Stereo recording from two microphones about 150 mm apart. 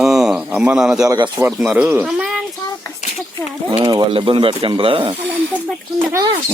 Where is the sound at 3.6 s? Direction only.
30° right (ahead or behind).